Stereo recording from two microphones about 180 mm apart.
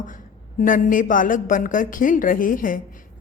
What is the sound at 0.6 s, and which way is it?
A woman's voice, 50° left (ahead or behind).